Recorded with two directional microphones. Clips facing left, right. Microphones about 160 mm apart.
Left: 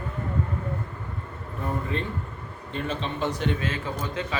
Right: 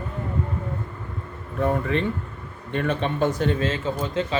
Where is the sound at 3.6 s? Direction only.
25° right (ahead or behind).